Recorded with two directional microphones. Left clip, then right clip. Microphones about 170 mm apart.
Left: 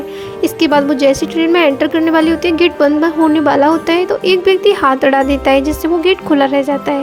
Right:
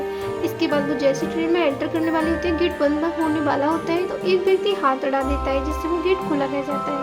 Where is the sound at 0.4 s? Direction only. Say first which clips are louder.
Left 11 dB; 55° left (ahead or behind).